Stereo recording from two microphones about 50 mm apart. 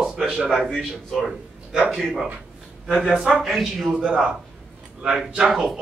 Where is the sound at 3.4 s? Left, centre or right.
Centre.